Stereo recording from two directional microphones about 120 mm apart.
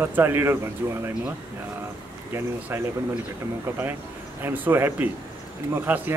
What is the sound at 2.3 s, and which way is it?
Speech, 20° right (ahead or behind).